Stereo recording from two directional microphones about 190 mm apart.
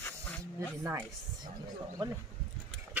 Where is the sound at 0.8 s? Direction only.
15° right (ahead or behind).